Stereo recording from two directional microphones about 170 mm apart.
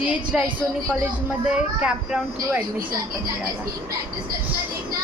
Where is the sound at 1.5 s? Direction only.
5° right (ahead or behind).